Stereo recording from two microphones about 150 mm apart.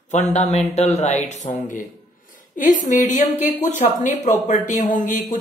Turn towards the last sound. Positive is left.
turn(degrees=60)  # may be behind; listen again after turning